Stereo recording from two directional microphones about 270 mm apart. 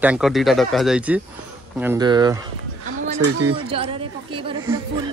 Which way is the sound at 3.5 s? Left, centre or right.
Centre.